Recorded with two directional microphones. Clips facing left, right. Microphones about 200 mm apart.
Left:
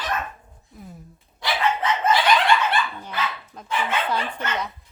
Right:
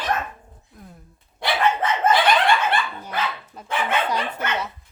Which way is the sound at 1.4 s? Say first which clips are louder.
Right 2 dB; 50° right (ahead or behind).